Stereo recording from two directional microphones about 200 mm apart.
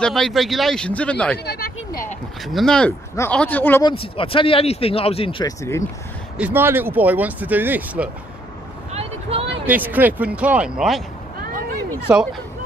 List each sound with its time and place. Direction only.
0.0 s speech: centre (ahead or behind)
1.4 s a sound: 50° left (ahead or behind)
2.4 s speech: centre (ahead or behind)
3.8 s speech: 25° left (ahead or behind)
6.3 s speech: 10° right (ahead or behind)
8.9 s vehicle: 30° right (ahead or behind)
9.7 s speech: 10° right (ahead or behind)
12.1 s speech: 5° right (ahead or behind)